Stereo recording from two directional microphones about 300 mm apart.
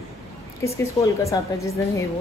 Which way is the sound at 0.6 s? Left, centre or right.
Centre.